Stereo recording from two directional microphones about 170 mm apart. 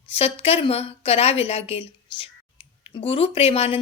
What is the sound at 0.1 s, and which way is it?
A woman's voice, 35° left (ahead or behind).